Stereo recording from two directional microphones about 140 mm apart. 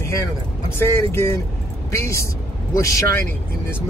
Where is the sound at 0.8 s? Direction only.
15° left (ahead or behind).